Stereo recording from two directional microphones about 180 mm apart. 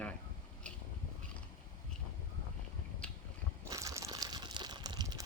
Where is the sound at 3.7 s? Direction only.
15° right (ahead or behind).